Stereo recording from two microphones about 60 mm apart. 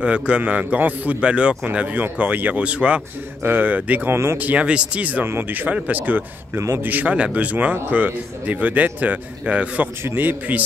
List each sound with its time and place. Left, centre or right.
0.0 s a man's voice: centre
3.4 s a man's voice: right
4.1 s speech: right
4.4 s a man's voice: right
5.2 s a man's voice: right
10.0 s a man's voice: right